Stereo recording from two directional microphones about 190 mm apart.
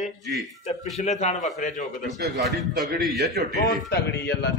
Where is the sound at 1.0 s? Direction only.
35° left (ahead or behind).